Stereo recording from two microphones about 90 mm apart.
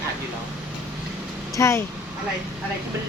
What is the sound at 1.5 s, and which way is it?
Speech, 35° left (ahead or behind).